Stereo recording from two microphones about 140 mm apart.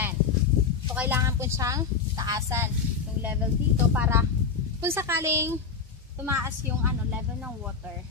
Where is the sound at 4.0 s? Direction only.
20° right (ahead or behind).